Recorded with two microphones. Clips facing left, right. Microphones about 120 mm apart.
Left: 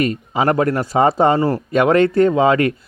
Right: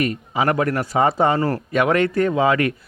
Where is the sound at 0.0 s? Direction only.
30° left (ahead or behind).